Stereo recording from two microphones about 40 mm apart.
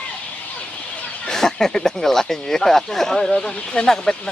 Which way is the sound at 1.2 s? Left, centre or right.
Centre.